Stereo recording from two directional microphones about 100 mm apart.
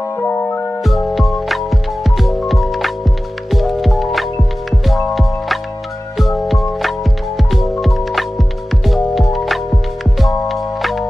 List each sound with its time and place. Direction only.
0.8 s music: centre (ahead or behind)